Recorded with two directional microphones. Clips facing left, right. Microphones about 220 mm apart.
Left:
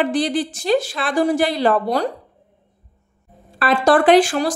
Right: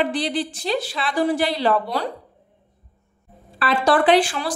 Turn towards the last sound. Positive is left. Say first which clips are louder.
# left 4 dB
turn(degrees=45)  # may be behind; listen again after turning